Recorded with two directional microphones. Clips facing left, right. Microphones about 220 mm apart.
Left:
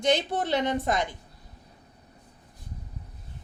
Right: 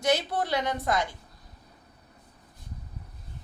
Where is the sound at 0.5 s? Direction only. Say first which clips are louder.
Left 3 dB; 20° left (ahead or behind).